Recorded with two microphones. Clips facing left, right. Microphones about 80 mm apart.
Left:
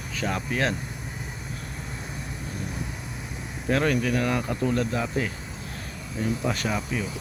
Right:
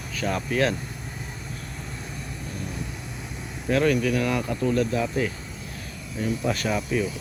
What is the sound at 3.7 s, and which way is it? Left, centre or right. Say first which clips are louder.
Speech: right 2 dB; left.